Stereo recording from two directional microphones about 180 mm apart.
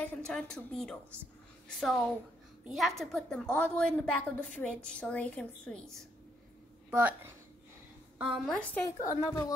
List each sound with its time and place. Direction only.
0.0 s a woman's voice: 10° left (ahead or behind)
6.9 s speech: 10° right (ahead or behind)
8.2 s a woman's voice: 5° right (ahead or behind)
8.8 s a woman's voice: 20° left (ahead or behind)